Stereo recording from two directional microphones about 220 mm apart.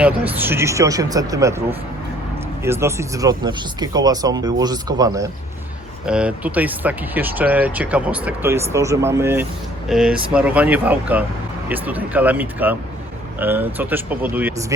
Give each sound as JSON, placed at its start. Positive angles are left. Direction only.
{"t": 0.0, "sound": "speech", "side_deg": -10}
{"t": 2.6, "sound": "speech", "side_deg": -10}
{"t": 6.1, "sound": "speech", "side_deg": -5}